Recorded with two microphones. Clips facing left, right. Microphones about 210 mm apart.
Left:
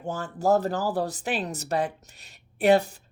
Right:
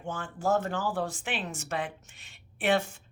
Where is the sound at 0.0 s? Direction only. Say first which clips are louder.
Left 5 dB; 40° left (ahead or behind).